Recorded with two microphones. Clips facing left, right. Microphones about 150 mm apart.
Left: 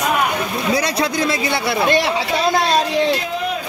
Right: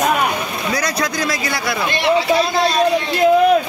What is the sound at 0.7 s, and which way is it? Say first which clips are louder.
Speech: left 2 dB; 25° left (ahead or behind).